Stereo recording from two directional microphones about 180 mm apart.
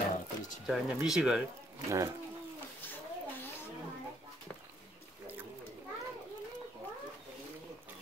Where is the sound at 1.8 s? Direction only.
15° right (ahead or behind).